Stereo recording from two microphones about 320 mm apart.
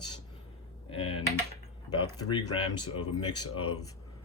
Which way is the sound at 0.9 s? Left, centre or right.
Centre.